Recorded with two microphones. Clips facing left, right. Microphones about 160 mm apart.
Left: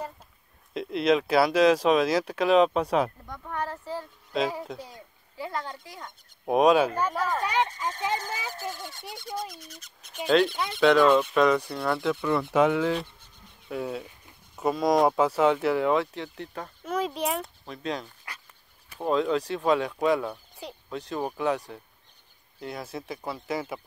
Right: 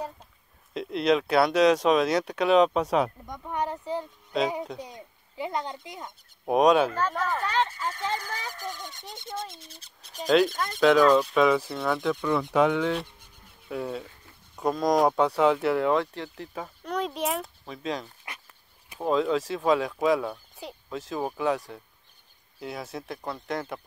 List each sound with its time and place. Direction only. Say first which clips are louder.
0.7 s speech: even; centre (ahead or behind)
3.3 s speech: right 3 dB; 15° right (ahead or behind)
4.3 s speech: right 1 dB; centre (ahead or behind)
4.7 s speech: right 2 dB; 20° right (ahead or behind)
6.4 s speech: even; centre (ahead or behind)
7.0 s speech: left 1 dB; 10° left (ahead or behind)
8.7 s speech: left 1 dB; 20° right (ahead or behind)
10.2 s speech: even; centre (ahead or behind)
18.3 s dog: right 1 dB; 20° right (ahead or behind)
18.9 s speech: even; centre (ahead or behind)